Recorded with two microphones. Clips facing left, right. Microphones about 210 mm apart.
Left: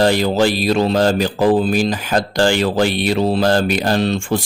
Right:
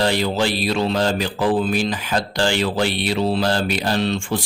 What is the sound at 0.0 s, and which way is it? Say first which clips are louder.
Speech: left 5 dB; 45° left (ahead or behind).